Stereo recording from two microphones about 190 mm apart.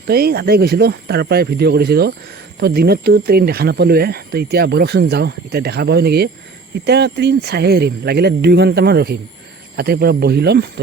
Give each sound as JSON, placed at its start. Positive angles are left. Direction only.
{"t": 0.1, "sound": "speech", "side_deg": -55}